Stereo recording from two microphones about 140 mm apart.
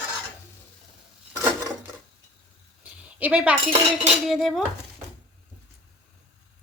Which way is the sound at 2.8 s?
10° right (ahead or behind).